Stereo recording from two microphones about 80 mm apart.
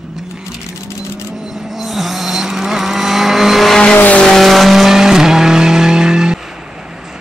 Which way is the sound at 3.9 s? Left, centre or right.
Centre.